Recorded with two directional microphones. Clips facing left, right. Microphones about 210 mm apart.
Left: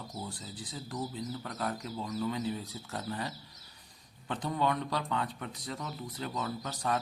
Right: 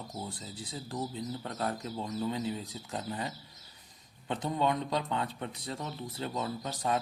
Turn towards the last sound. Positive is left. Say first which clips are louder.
# right 1 dB
turn(degrees=-25)  # may be behind; listen again after turning